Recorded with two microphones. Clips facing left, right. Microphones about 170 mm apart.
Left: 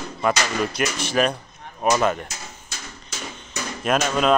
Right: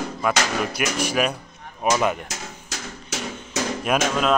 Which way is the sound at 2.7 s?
85° right.